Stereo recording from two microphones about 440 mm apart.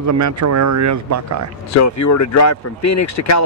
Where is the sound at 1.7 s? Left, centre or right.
Left.